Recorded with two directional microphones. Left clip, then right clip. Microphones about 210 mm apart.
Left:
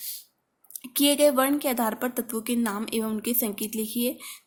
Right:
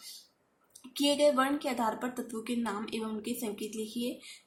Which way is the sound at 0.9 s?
50° left (ahead or behind).